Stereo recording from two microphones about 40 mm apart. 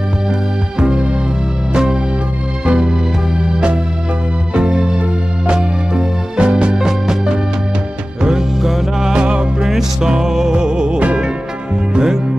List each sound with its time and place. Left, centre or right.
0.7 s music: centre
4.6 s music: right
9.1 s music: right
9.7 s music: centre